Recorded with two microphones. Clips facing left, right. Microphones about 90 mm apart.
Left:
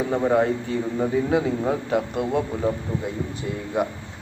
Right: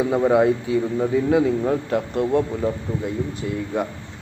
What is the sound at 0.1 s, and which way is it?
Speech, 5° right (ahead or behind).